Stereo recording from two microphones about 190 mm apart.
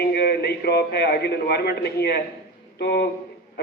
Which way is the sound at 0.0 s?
55° left (ahead or behind).